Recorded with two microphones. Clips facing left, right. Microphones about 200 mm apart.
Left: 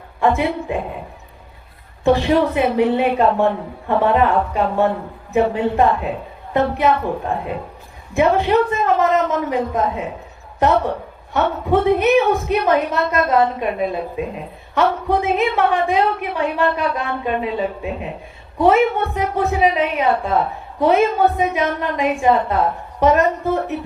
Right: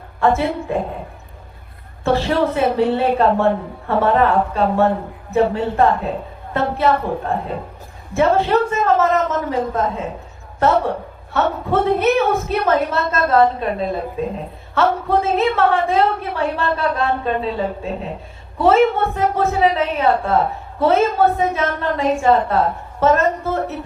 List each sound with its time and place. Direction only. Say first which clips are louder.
0.2 s a woman's voice: even; 15° left (ahead or behind)
2.0 s a woman's voice: left 2 dB; 15° left (ahead or behind)